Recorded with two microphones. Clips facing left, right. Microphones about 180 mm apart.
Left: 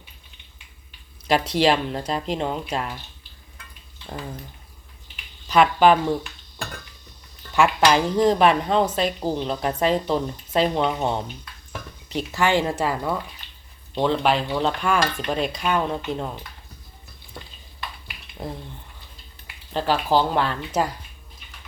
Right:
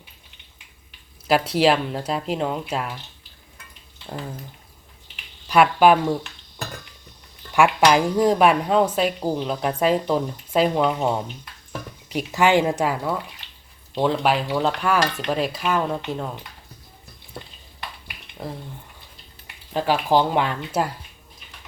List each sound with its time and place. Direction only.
1.3 s stir: 5° right (ahead or behind)
5.5 s speech: 10° right (ahead or behind)
7.5 s speech: 10° right (ahead or behind)
13.9 s stir: 5° right (ahead or behind)
17.4 s a sound: centre (ahead or behind)
18.4 s stir: centre (ahead or behind)
19.7 s speech: 15° right (ahead or behind)